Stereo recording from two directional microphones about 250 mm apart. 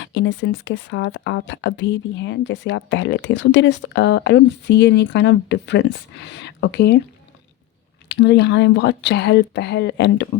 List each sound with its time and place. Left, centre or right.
0.0 s speech: left
8.0 s speech: left